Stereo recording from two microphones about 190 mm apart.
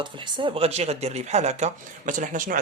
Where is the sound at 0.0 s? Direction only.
25° right (ahead or behind).